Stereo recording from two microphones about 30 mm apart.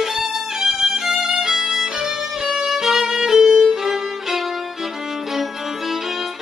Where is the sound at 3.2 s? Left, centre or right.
Centre.